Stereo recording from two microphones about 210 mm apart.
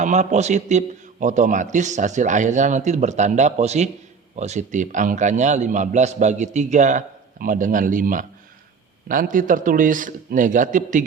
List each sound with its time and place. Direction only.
0.0 s a man's voice: 35° right (ahead or behind)